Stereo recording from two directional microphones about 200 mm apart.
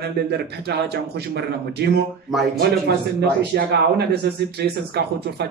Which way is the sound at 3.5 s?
55° right (ahead or behind).